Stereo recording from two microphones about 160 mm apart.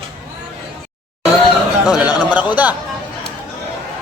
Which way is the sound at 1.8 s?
5° right (ahead or behind).